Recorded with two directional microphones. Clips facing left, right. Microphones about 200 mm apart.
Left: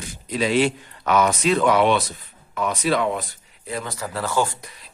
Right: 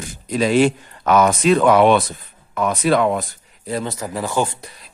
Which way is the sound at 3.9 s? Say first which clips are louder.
Left 1 dB; 15° right (ahead or behind).